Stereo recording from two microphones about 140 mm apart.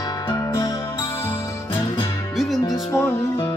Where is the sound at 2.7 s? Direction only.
20° left (ahead or behind).